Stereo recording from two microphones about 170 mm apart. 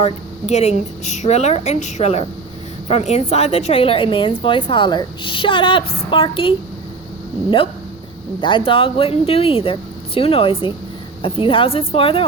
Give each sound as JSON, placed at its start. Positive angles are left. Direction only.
{"t": 0.0, "sound": "a woman's voice", "side_deg": 40}
{"t": 8.4, "sound": "a woman's voice", "side_deg": 30}